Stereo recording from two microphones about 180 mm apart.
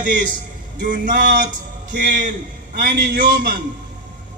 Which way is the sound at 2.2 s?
55° right (ahead or behind).